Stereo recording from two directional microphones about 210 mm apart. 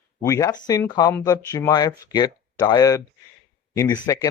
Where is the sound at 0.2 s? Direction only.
15° left (ahead or behind).